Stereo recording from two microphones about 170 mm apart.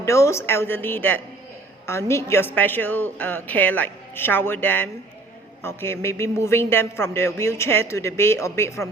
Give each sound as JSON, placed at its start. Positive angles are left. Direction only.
{"t": 0.0, "sound": "a man's voice", "side_deg": 15}